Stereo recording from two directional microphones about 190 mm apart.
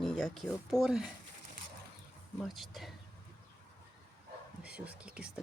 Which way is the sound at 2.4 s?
Centre (ahead or behind).